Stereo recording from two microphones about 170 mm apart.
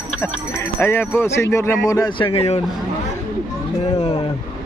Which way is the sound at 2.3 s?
35° left (ahead or behind).